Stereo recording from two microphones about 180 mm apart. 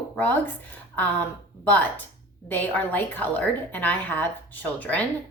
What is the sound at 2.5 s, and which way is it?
A woman's voice, 10° left (ahead or behind).